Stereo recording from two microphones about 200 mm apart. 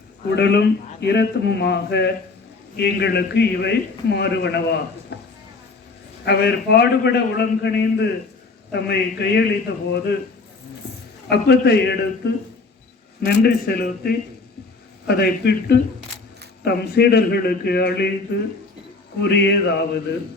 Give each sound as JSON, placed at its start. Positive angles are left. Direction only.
{"t": 0.3, "sound": "a man's voice", "side_deg": 55}
{"t": 11.3, "sound": "a man's voice", "side_deg": 55}